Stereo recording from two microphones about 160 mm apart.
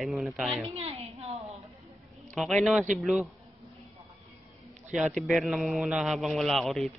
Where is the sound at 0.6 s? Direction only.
40° right (ahead or behind).